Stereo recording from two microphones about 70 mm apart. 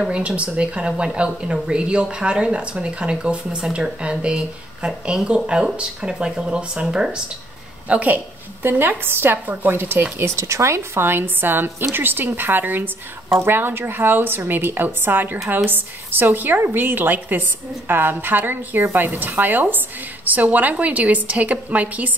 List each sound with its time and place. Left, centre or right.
0.1 s a woman's voice: centre
8.6 s a woman's voice: right